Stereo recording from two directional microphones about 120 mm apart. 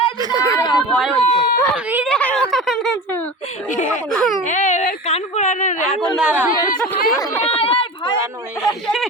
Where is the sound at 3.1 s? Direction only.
15° left (ahead or behind).